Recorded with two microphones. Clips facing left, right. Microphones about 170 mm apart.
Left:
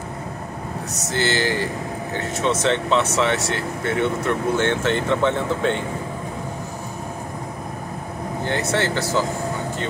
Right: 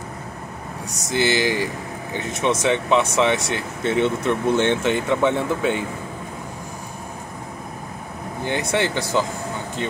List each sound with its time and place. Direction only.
1.1 s speech: 15° right (ahead or behind)
8.5 s speech: 15° right (ahead or behind)